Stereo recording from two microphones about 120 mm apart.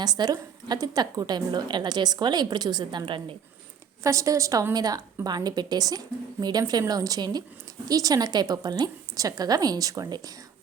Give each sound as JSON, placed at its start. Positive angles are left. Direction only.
{"t": 0.0, "sound": "a woman's voice", "side_deg": -35}
{"t": 4.0, "sound": "a woman's voice", "side_deg": -25}